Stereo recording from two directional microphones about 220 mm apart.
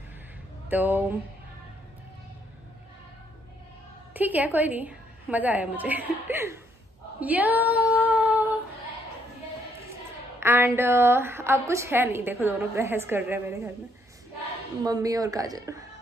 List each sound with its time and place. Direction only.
0.7 s a woman's voice: 10° right (ahead or behind)
4.1 s a woman's voice: 5° right (ahead or behind)
8.1 s humming: 10° right (ahead or behind)
10.4 s a woman's voice: 10° right (ahead or behind)
14.9 s a woman's voice: 15° right (ahead or behind)